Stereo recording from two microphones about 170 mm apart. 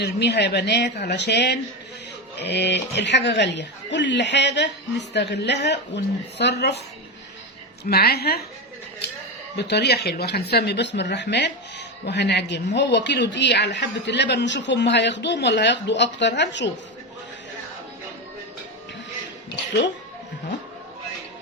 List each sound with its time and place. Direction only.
0.0 s a woman's voice: 75° left (ahead or behind)
7.9 s a woman's voice: 65° left (ahead or behind)
9.6 s a woman's voice: 80° left